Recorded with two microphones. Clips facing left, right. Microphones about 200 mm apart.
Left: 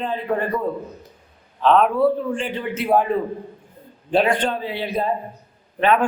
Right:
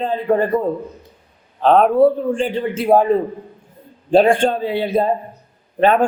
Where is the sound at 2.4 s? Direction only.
30° right (ahead or behind).